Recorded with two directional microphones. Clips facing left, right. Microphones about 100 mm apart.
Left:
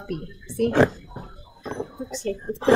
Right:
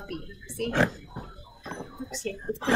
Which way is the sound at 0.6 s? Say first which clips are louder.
Left 7 dB; 30° left (ahead or behind).